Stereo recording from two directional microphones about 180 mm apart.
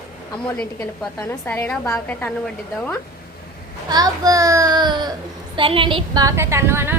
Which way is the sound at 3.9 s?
20° right (ahead or behind).